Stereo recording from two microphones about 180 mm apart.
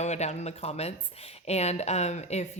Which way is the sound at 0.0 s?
40° left (ahead or behind).